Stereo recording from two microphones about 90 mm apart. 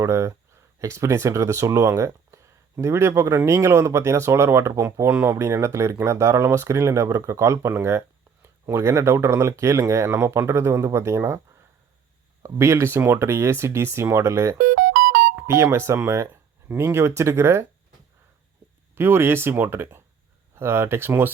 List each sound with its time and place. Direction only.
0.0 s speech: 35° right (ahead or behind)
12.4 s speech: 30° right (ahead or behind)
18.9 s speech: 25° right (ahead or behind)